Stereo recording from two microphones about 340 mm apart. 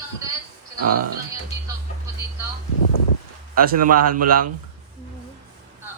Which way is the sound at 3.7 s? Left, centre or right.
Right.